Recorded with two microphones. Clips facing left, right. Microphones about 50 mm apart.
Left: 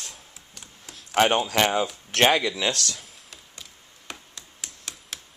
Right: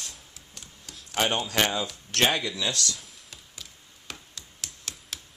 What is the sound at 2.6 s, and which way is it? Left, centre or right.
Speech, left.